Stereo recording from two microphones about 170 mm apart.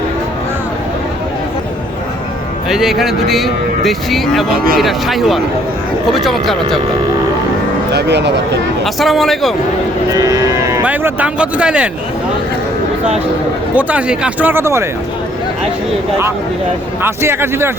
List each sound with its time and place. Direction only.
2.6 s speech: centre (ahead or behind)
7.9 s speech: 90° right
8.8 s speech: centre (ahead or behind)
10.1 s speech: 20° right (ahead or behind)
13.7 s speech: 10° right (ahead or behind)
17.0 s speech: 15° right (ahead or behind)